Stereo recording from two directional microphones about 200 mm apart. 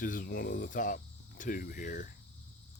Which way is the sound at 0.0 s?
45° left (ahead or behind).